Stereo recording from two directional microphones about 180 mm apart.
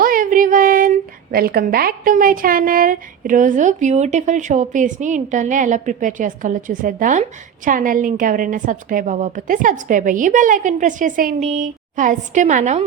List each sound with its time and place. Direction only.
0.0 s a woman's voice: 50° right (ahead or behind)